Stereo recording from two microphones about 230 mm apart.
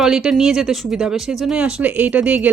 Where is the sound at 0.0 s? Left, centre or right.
Centre.